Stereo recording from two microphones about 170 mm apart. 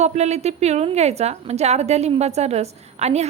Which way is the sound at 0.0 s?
40° right (ahead or behind).